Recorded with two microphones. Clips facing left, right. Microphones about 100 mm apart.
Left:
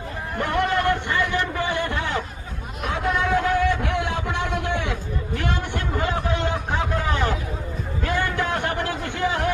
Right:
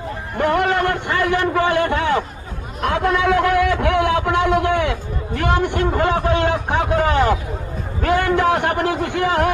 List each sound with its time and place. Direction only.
0.3 s a man's voice: 70° right (ahead or behind)
2.8 s a sound: 65° right (ahead or behind)
8.0 s music: 90° right